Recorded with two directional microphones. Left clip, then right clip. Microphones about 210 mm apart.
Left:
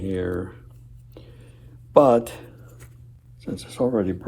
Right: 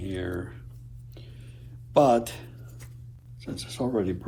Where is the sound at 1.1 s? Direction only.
30° left (ahead or behind).